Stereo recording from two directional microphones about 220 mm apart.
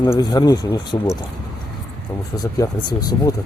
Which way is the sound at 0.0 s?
20° left (ahead or behind).